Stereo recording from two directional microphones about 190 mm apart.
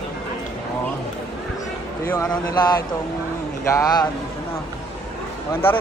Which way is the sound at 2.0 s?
15° left (ahead or behind).